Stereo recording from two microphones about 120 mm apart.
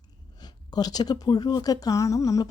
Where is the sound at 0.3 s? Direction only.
35° left (ahead or behind).